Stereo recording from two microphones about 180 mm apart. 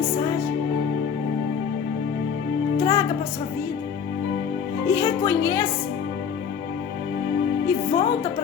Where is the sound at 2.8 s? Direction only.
15° left (ahead or behind).